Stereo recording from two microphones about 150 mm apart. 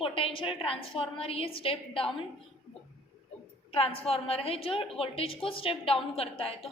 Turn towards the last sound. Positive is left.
turn(degrees=40)  # may be behind; listen again after turning